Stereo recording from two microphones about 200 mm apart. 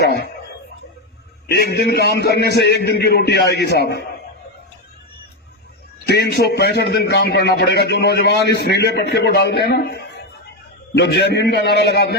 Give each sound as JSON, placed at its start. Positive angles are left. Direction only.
{"t": 0.0, "sound": "speech", "side_deg": 55}
{"t": 1.5, "sound": "a man's voice", "side_deg": 55}
{"t": 6.1, "sound": "a man's voice", "side_deg": 55}